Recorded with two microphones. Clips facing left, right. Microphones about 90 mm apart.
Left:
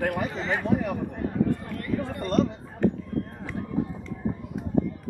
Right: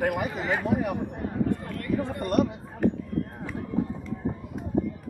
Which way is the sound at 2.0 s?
20° right (ahead or behind).